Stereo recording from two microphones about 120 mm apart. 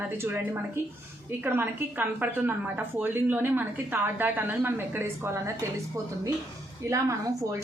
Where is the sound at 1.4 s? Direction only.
15° right (ahead or behind).